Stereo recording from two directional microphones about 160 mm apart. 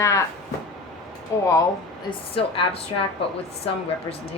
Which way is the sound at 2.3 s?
35° left (ahead or behind).